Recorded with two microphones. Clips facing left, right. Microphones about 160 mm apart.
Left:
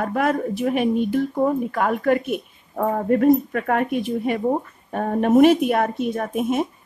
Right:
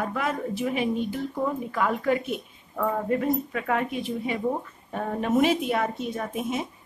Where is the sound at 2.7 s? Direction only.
45° left (ahead or behind).